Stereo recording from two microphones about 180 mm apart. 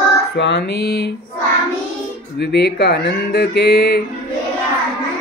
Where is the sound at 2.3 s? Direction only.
65° left (ahead or behind).